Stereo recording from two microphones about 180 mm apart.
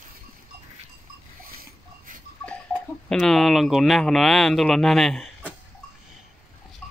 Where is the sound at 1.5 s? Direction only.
50° right (ahead or behind).